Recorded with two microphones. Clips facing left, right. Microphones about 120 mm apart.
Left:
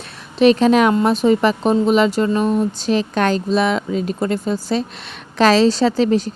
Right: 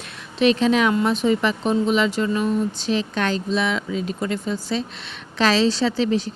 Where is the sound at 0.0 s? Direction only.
35° left (ahead or behind).